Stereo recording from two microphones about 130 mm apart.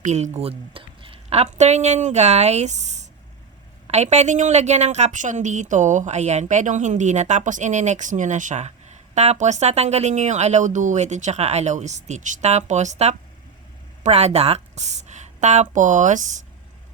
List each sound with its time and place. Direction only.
0.0 s a woman's voice: 60° right (ahead or behind)